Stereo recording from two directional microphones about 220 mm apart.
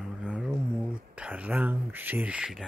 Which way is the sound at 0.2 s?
5° right (ahead or behind).